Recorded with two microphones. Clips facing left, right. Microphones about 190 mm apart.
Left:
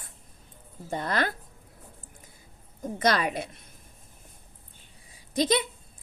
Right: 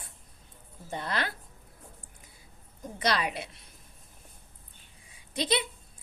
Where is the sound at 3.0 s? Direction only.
45° left (ahead or behind).